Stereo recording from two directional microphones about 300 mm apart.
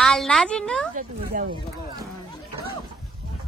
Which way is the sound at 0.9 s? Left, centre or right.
Right.